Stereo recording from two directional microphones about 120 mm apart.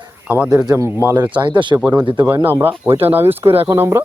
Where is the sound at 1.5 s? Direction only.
40° right (ahead or behind).